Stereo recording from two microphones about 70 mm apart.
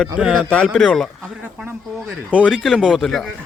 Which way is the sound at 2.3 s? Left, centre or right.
Centre.